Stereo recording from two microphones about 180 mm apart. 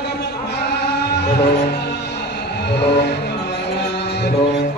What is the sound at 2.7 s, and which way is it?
Music, 70° left (ahead or behind).